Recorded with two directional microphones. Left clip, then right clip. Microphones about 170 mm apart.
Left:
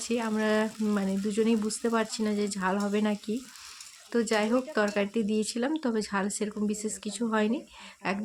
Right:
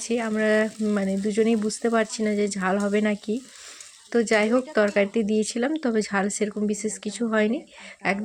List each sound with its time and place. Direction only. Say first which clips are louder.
0.0 s speech: right 5 dB; 10° right (ahead or behind)